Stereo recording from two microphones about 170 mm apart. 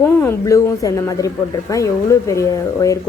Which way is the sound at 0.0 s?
15° left (ahead or behind).